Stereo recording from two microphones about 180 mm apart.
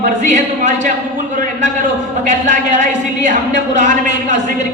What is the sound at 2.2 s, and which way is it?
Speech, 45° right (ahead or behind).